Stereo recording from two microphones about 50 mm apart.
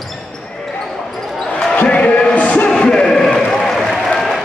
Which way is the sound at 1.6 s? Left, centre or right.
Left.